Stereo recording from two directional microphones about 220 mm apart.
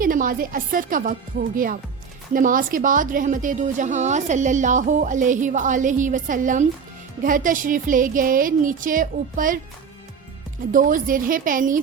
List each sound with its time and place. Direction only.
0.0 s a woman's voice: 40° right (ahead or behind)
10.7 s a woman's voice: 40° right (ahead or behind)